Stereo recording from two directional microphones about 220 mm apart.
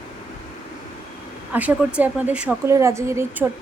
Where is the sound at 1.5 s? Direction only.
5° right (ahead or behind).